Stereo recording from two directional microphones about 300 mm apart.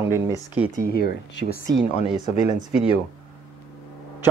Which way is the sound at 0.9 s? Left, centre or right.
Left.